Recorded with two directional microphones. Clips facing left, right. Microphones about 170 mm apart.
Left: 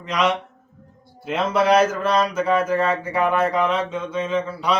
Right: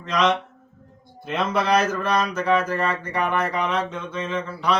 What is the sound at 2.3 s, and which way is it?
Speech, 5° left (ahead or behind).